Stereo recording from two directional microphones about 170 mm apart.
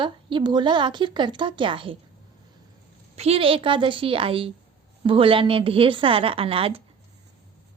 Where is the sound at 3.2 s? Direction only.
35° right (ahead or behind).